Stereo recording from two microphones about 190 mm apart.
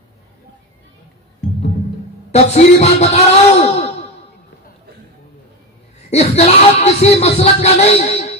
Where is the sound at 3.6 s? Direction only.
35° left (ahead or behind).